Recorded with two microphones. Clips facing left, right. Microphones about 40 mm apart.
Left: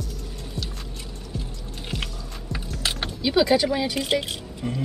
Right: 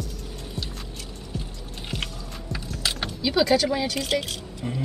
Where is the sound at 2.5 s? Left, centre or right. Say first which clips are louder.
Left 1 dB; centre.